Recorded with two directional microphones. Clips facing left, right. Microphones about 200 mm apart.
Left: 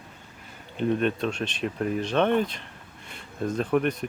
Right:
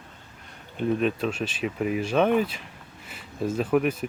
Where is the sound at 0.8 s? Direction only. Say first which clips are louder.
Even; centre (ahead or behind).